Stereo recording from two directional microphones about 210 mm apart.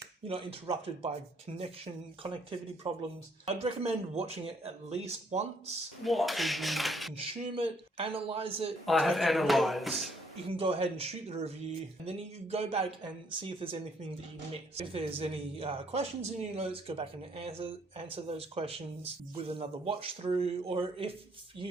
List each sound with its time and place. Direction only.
0.3 s speech: 25° right (ahead or behind)
6.1 s speech: centre (ahead or behind)
7.2 s speech: 25° right (ahead or behind)
8.9 s speech: centre (ahead or behind)
10.5 s speech: 25° right (ahead or behind)
14.8 s speech: 30° right (ahead or behind)